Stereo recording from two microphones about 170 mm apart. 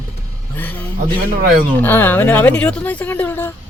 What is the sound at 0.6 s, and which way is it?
Vehicle, 10° left (ahead or behind).